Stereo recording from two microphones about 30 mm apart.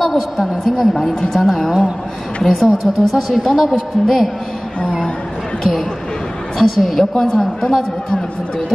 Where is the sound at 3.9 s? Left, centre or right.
Centre.